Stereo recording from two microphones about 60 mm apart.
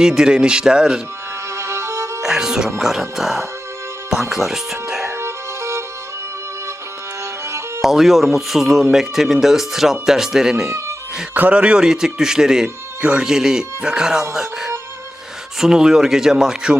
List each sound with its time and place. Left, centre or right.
0.0 s speech: centre
1.5 s violin: right
2.2 s speech: centre
5.0 s music: right
7.8 s speech: centre
11.3 s speech: right
12.6 s speech: right
15.5 s speech: centre